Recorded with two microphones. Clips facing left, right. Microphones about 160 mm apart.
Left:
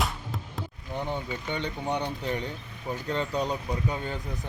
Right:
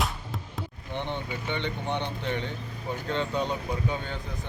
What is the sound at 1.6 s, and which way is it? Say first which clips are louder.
Speech: left 2 dB; 40° left (ahead or behind).